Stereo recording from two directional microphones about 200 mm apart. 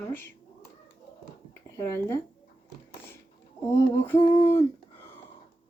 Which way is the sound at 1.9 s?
10° left (ahead or behind).